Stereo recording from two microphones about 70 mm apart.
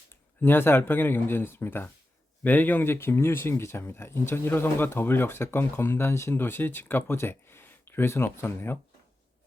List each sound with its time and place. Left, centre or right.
0.1 s speech: left